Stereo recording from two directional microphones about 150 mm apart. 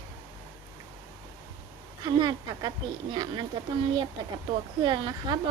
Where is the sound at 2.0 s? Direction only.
30° right (ahead or behind).